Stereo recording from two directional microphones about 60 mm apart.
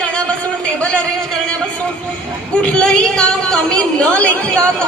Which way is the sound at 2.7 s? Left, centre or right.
Centre.